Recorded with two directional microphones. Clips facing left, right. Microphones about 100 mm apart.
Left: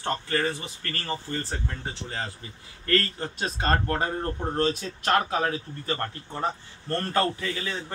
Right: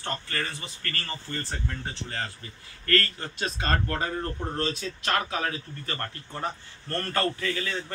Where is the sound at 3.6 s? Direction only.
45° left (ahead or behind).